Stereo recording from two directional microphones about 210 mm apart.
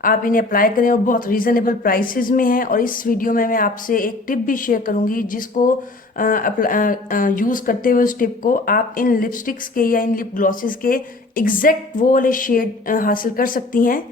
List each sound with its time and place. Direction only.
0.0 s a woman's voice: 40° left (ahead or behind)